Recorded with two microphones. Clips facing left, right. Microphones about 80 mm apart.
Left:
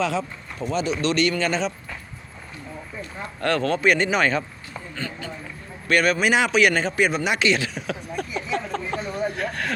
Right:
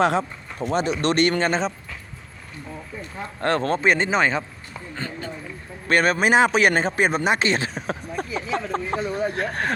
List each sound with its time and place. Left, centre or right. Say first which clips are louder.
0.0 s speech: right 4 dB; right
3.4 s speech: even; right
4.9 s a sound: right 1 dB; right
5.9 s speech: right 1 dB; right